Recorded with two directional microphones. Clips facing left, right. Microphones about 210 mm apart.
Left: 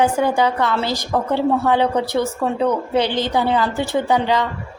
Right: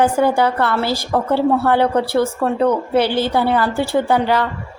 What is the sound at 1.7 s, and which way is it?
Speech, 15° left (ahead or behind).